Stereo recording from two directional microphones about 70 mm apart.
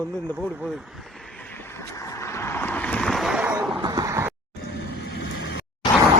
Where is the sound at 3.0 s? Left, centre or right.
Centre.